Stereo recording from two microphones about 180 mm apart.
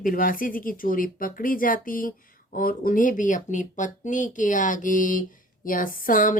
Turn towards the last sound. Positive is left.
turn(degrees=50)  # may be behind; listen again after turning